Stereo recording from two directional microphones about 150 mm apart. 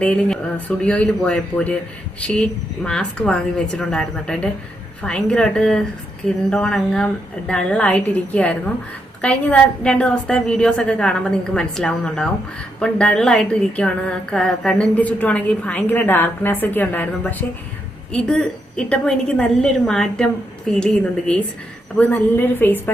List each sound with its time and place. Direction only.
0.0 s a woman's voice: 5° left (ahead or behind)